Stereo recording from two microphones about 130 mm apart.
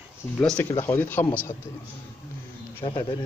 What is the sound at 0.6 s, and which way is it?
Speech, 20° left (ahead or behind).